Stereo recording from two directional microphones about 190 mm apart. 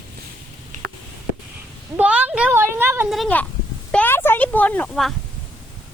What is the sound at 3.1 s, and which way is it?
Speech, 5° left (ahead or behind).